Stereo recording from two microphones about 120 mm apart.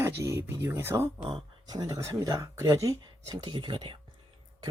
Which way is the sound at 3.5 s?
45° right (ahead or behind).